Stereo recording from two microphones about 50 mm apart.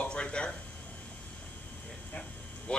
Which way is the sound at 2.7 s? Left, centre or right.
Left.